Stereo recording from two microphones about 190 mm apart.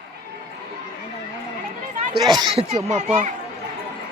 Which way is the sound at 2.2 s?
20° right (ahead or behind).